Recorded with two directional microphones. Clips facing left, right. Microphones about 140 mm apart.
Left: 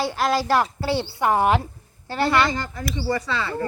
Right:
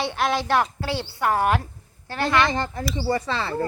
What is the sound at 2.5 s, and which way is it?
Speech, 25° right (ahead or behind).